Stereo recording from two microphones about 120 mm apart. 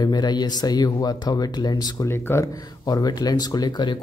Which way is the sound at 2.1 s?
20° left (ahead or behind).